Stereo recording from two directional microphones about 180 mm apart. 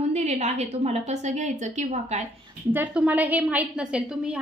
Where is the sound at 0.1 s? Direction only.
40° right (ahead or behind).